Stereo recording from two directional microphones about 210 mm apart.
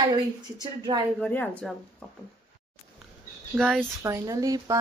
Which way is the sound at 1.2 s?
5° left (ahead or behind).